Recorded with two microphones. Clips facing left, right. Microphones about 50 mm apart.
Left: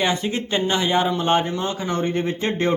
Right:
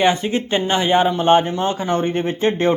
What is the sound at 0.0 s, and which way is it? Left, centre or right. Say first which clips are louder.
A man's voice: right 5 dB; right.